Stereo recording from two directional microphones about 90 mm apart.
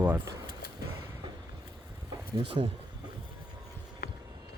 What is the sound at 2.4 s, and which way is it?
Speech, 75° right (ahead or behind).